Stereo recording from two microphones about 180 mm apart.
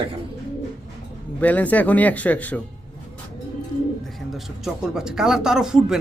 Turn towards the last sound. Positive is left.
turn(degrees=-5)  # may be behind; listen again after turning